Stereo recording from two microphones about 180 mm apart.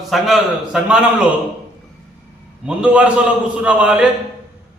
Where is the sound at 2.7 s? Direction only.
5° right (ahead or behind).